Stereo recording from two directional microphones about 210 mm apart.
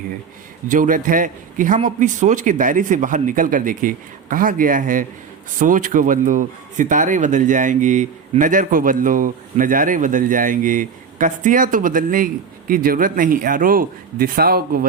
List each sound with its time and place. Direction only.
0.7 s speech: 40° right (ahead or behind)